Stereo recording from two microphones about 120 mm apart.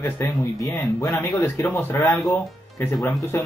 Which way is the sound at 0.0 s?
20° left (ahead or behind).